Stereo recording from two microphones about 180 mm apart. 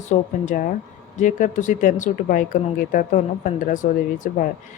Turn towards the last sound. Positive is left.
turn(degrees=45)  # may be behind; listen again after turning